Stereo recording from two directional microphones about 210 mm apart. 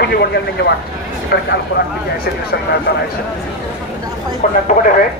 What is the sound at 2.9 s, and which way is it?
Speech, 50° left (ahead or behind).